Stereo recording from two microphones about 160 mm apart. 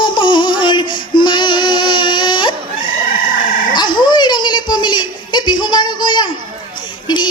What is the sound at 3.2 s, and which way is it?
Chicken, 60° left (ahead or behind).